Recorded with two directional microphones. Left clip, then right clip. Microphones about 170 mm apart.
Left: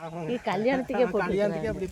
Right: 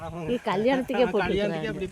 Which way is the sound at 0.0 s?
80° right.